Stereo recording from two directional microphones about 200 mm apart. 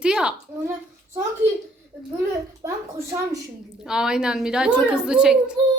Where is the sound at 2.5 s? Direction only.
15° right (ahead or behind).